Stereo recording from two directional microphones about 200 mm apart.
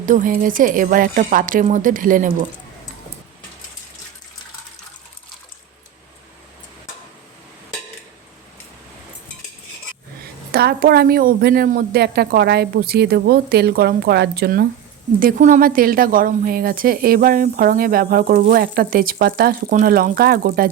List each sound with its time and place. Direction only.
0.0 s a woman's voice: 40° right (ahead or behind)
10.5 s a woman's voice: 50° right (ahead or behind)